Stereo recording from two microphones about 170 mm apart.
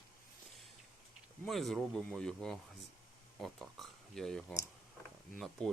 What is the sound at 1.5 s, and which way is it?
Speech, centre (ahead or behind).